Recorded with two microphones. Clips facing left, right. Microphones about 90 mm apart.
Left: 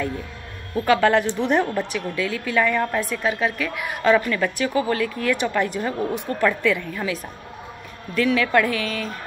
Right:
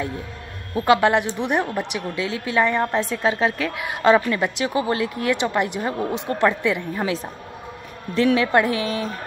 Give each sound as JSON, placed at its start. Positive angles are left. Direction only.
{"t": 0.7, "sound": "a woman's voice", "side_deg": -15}
{"t": 6.9, "sound": "a woman's voice", "side_deg": -35}